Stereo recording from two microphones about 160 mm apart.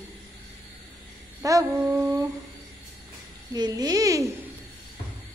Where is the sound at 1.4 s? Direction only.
20° right (ahead or behind).